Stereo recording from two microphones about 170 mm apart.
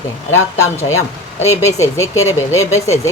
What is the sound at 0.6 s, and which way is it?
Speech, 15° left (ahead or behind).